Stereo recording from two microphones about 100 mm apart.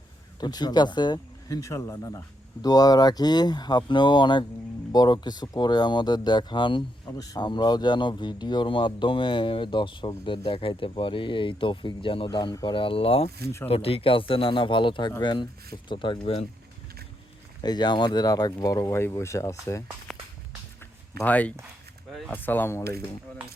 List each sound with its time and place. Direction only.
0.3 s speech: 45° left (ahead or behind)
1.6 s speech: 30° left (ahead or behind); by 13.3 s 80° left
13.7 s speech: 70° left (ahead or behind)
17.6 s speech: 45° left (ahead or behind)
20.1 s walk: centre (ahead or behind)
21.2 s speech: 15° left (ahead or behind)